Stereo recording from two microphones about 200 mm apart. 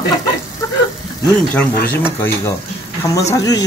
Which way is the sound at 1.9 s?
10° left (ahead or behind).